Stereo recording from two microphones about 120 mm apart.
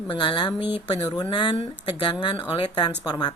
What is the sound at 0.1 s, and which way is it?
Speech, 45° left (ahead or behind).